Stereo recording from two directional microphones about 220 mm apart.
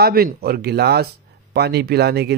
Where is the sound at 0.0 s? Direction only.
45° right (ahead or behind).